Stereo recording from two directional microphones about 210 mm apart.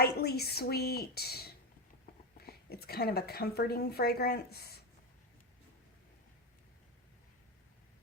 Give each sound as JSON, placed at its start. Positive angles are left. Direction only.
{"t": 0.0, "sound": "a woman's voice", "side_deg": 50}